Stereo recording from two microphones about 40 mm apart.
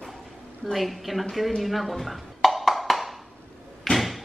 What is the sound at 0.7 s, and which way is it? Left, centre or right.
Speech, centre.